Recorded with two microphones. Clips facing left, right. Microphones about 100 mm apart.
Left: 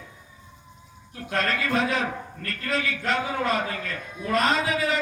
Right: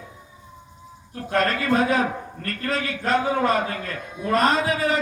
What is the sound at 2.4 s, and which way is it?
A man's voice, 40° right (ahead or behind).